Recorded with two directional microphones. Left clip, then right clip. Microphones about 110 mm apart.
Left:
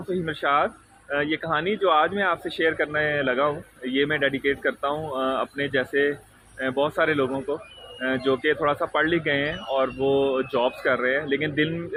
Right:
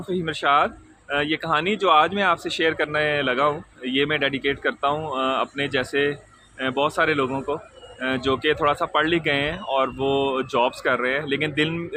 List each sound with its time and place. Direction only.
0.1 s speech: 35° right (ahead or behind)